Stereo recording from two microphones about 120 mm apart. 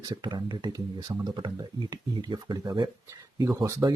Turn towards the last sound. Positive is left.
turn(degrees=-30)  # may be behind; listen again after turning